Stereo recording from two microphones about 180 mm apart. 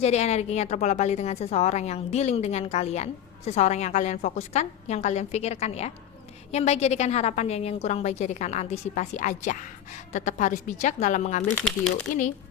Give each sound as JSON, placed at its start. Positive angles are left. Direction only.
{"t": 0.0, "sound": "a woman's voice", "side_deg": 35}
{"t": 11.5, "sound": "speech", "side_deg": 5}